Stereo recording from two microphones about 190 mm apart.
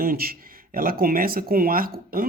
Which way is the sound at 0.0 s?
50° right (ahead or behind).